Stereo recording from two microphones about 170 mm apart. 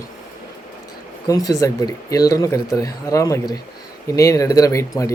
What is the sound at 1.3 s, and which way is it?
Speech, 20° left (ahead or behind).